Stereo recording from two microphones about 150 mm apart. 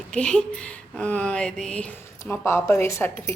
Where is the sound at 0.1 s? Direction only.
5° left (ahead or behind).